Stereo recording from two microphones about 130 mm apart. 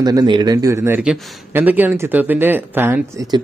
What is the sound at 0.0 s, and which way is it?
Speech, 30° right (ahead or behind).